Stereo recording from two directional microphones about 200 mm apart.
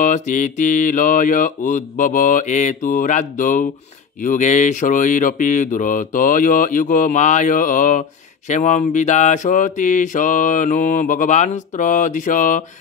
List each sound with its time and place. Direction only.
0.0 s speech: 40° left (ahead or behind)